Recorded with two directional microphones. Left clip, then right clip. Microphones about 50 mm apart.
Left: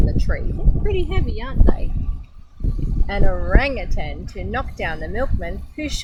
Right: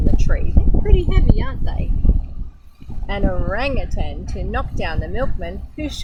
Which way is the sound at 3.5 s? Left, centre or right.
Centre.